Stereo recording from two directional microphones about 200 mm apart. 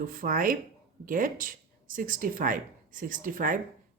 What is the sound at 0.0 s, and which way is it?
Speech, 45° right (ahead or behind).